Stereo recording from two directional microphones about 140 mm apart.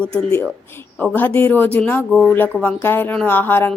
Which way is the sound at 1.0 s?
10° left (ahead or behind).